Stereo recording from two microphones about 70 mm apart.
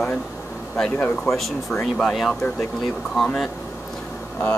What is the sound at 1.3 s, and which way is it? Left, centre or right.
Speech, left.